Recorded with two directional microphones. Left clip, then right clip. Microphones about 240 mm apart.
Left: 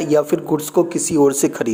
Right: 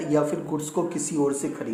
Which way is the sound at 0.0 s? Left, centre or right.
Left.